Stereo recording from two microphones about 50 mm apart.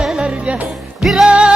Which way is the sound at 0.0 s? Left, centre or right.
Centre.